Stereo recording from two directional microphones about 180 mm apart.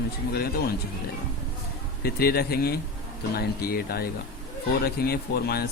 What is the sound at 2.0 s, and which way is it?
A man's voice, 60° left (ahead or behind).